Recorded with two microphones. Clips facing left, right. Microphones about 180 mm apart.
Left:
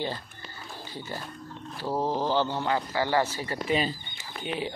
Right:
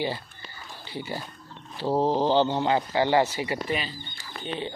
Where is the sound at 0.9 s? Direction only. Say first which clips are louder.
Right 4 dB; 10° right (ahead or behind).